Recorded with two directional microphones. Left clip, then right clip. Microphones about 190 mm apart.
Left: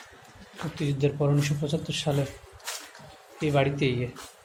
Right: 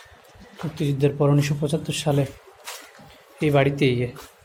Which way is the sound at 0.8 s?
30° right (ahead or behind).